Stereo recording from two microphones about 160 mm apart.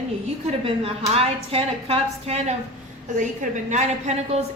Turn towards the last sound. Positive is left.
turn(degrees=-45)  # may be behind; listen again after turning